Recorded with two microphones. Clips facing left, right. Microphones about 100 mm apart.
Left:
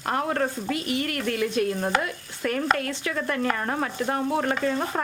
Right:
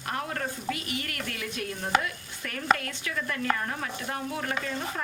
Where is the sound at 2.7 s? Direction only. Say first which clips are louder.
Left 6 dB; 40° left (ahead or behind).